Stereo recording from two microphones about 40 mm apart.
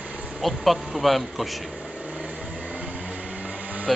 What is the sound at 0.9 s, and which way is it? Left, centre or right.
Speech, centre.